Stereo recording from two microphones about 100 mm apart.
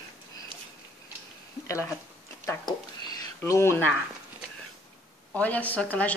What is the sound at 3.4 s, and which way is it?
Speech, 25° left (ahead or behind).